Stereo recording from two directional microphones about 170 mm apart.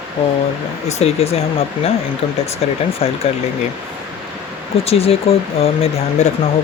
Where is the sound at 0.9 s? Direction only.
40° left (ahead or behind).